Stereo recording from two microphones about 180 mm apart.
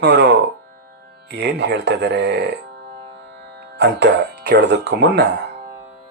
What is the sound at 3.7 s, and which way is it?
Speech, 70° right (ahead or behind).